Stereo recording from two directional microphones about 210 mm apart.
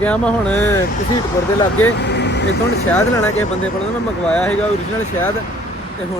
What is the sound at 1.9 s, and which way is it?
Vehicle, 55° left (ahead or behind).